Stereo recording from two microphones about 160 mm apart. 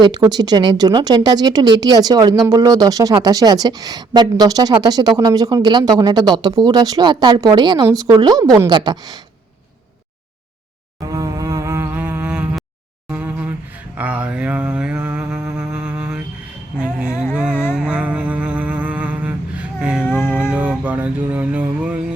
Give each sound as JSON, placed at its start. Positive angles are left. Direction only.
{"t": 0.3, "sound": "speech", "side_deg": -25}
{"t": 11.1, "sound": "a sound", "side_deg": -20}
{"t": 15.5, "sound": "music", "side_deg": -5}
{"t": 17.5, "sound": "music", "side_deg": 15}
{"t": 17.7, "sound": "music", "side_deg": -10}